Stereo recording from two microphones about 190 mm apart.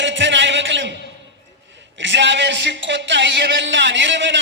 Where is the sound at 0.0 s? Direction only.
75° right (ahead or behind).